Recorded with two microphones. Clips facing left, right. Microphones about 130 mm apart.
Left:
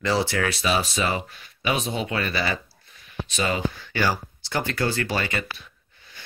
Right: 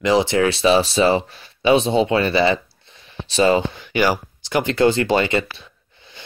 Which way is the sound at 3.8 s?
15° right (ahead or behind).